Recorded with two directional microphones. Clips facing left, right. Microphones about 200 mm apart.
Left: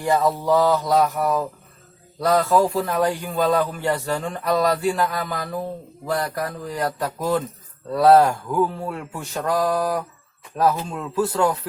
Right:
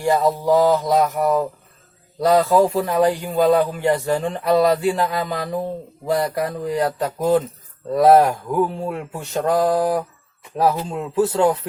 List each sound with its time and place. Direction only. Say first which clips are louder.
0.0 s a man's voice: right 2 dB; 20° right (ahead or behind)
5.1 s mantra: right 4 dB; 20° right (ahead or behind)